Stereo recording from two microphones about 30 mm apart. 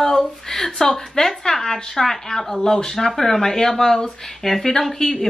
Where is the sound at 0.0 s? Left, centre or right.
Centre.